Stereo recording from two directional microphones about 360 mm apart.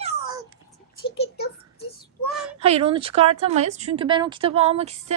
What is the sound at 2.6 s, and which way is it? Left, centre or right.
Speech, centre.